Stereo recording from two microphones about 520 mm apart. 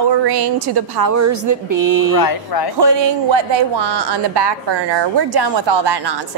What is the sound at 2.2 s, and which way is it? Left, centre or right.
Speech, left.